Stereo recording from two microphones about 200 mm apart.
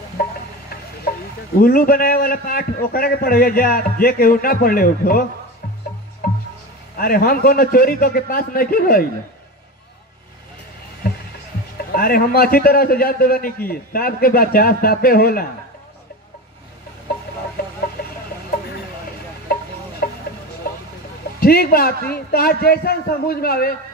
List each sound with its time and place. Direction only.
1.1 s a sound: 50° left (ahead or behind)
1.6 s a man's voice: 45° left (ahead or behind)
6.2 s music: 45° left (ahead or behind)
7.0 s a man's voice: 45° left (ahead or behind)
11.9 s a man's voice: 45° left (ahead or behind)
20.0 s music: 45° left (ahead or behind)
21.4 s a man's voice: 50° left (ahead or behind)